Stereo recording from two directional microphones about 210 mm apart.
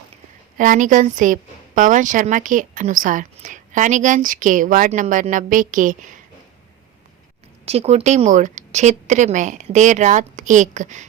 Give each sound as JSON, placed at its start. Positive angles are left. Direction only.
{"t": 0.5, "sound": "a woman's voice", "side_deg": -40}
{"t": 7.6, "sound": "a woman's voice", "side_deg": -30}